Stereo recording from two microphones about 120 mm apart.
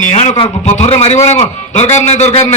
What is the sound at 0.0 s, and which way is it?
Speech, 85° left.